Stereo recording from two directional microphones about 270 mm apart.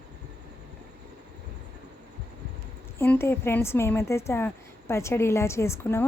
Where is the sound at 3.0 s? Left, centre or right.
Centre.